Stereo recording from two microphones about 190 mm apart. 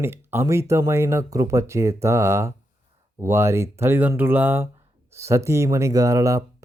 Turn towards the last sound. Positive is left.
turn(degrees=-15)  # may be behind; listen again after turning